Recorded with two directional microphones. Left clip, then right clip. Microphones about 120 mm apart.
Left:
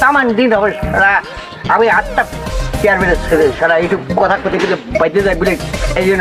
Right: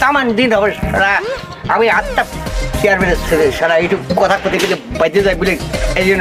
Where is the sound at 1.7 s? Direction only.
20° right (ahead or behind).